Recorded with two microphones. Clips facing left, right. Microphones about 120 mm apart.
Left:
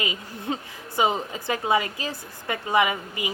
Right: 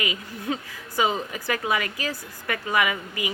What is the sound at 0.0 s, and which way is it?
A woman's voice, 25° left (ahead or behind).